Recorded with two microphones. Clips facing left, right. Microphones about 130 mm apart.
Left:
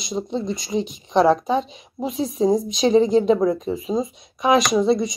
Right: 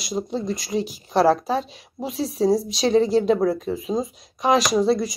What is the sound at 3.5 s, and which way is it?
Speech, 40° left (ahead or behind).